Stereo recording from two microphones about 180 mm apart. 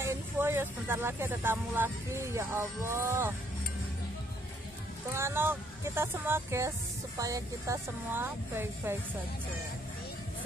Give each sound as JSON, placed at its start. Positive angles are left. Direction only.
{"t": 0.0, "sound": "speech", "side_deg": -10}
{"t": 5.1, "sound": "speech", "side_deg": -15}